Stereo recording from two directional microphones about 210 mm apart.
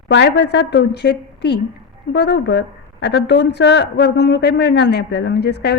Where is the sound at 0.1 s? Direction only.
55° left (ahead or behind).